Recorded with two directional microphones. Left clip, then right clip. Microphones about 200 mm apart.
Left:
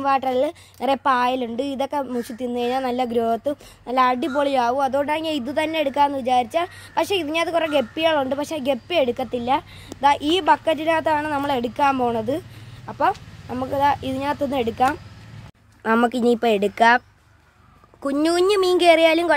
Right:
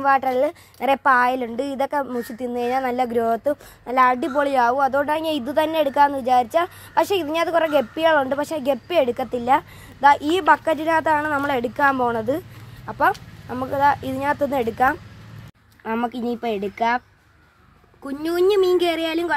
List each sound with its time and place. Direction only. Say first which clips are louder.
0.0 s a woman's voice: right 2 dB; centre (ahead or behind)
15.8 s speech: left 6 dB; 55° left (ahead or behind)
18.0 s speech: left 1 dB; 45° left (ahead or behind)